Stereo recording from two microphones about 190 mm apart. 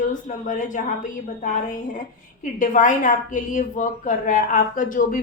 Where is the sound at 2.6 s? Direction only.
40° left (ahead or behind).